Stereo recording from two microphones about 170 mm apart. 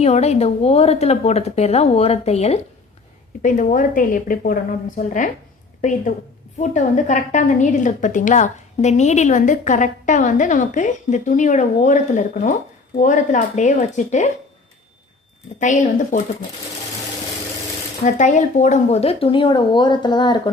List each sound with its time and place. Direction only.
0.0 s speech: 40° left (ahead or behind)
3.4 s a woman's voice: 50° left (ahead or behind)
6.6 s a woman's voice: 45° left (ahead or behind)
15.5 s a woman's voice: 45° left (ahead or behind)
18.0 s speech: 45° left (ahead or behind); by 20.5 s 25° left (ahead or behind)